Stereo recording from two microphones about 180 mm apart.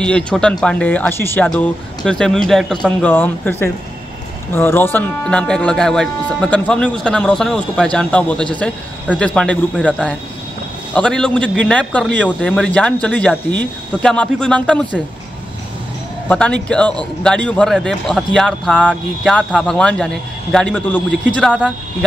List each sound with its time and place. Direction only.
0.0 s speech: 5° left (ahead or behind)
16.3 s speech: 5° left (ahead or behind)